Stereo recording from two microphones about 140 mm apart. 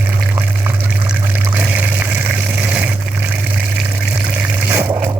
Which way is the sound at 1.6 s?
10° right (ahead or behind).